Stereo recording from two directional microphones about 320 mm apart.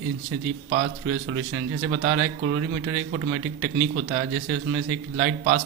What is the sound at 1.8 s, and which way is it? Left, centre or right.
A man's voice, right.